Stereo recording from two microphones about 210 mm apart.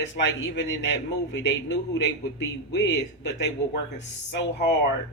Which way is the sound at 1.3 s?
55° left (ahead or behind).